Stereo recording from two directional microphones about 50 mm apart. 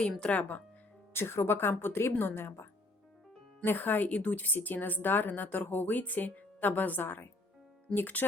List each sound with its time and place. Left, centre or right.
0.0 s speech: left
1.1 s speech: left
3.6 s speech: left